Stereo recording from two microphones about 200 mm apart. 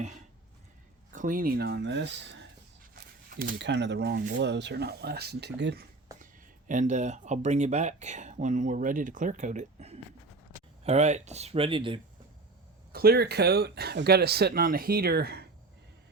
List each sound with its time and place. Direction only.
1.1 s speech: 40° right (ahead or behind); by 2.4 s 60° right (ahead or behind)
2.9 s speech: 45° right (ahead or behind)
6.7 s speech: 40° right (ahead or behind)
12.9 s speech: 50° right (ahead or behind)